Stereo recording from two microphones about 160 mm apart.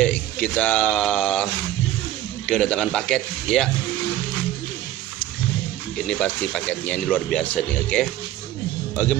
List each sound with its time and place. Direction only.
0.0 s speech: 5° left (ahead or behind)
2.4 s speech: 5° left (ahead or behind)
5.9 s speech: 5° left (ahead or behind)